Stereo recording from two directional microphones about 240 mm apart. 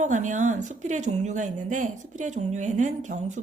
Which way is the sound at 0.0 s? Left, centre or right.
Right.